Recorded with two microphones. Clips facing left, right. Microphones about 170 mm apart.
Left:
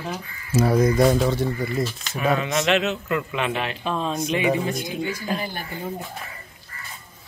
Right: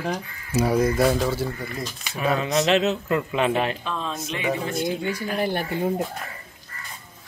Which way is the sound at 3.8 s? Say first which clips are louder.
Left 5 dB; 15° left (ahead or behind).